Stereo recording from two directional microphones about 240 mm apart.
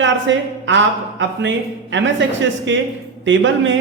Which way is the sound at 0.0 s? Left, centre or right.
Right.